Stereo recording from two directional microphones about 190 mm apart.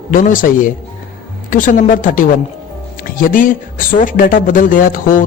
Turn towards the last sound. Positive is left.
turn(degrees=45)  # may be behind; listen again after turning